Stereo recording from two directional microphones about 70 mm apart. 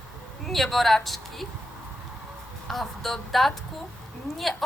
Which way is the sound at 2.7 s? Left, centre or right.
Centre.